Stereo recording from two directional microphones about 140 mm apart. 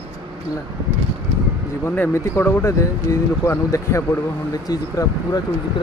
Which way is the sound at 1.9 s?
15° left (ahead or behind).